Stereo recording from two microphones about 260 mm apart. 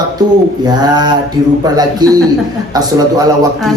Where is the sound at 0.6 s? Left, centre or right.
Centre.